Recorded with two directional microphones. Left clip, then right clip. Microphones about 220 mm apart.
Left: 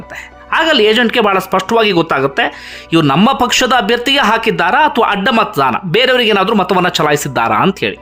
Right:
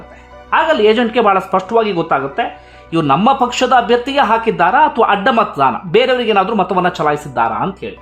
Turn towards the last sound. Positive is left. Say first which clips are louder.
# left 5 dB
turn(degrees=20)  # may be behind; listen again after turning